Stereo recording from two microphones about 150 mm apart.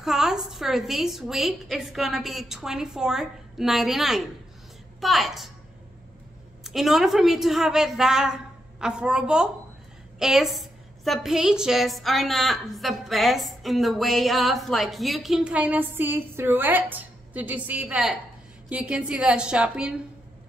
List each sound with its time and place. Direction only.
0.0 s a woman's voice: 5° right (ahead or behind)
6.6 s a woman's voice: centre (ahead or behind)